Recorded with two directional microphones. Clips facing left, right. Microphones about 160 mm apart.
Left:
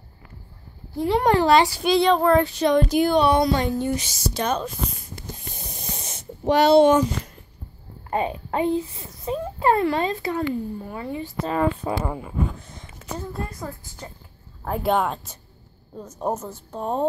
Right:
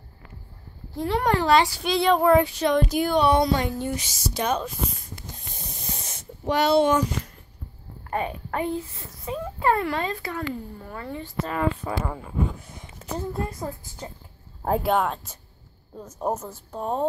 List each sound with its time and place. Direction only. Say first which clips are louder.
0.9 s speech: left 4 dB; 15° left (ahead or behind)
1.2 s a child's voice: left 3 dB; 25° left (ahead or behind)
2.0 s child singing: even; 10° right (ahead or behind)
2.9 s speech: left 3 dB; 5° right (ahead or behind)
3.3 s a woman's voice: left 1 dB; 20° right (ahead or behind)
3.7 s child singing: left 4 dB; 5° right (ahead or behind)
5.9 s snake: left 3 dB; 20° left (ahead or behind)
8.1 s a child's voice: left 3 dB; 25° left (ahead or behind)
11.4 s a child's voice: left 4 dB; 30° left (ahead or behind)
11.9 s speech: left 3 dB; 10° left (ahead or behind)
12.5 s a sound: left 1 dB; 10° right (ahead or behind)
13.0 s a woman's voice: right 2 dB; 25° right (ahead or behind)
14.8 s speech: left 5 dB; 5° right (ahead or behind)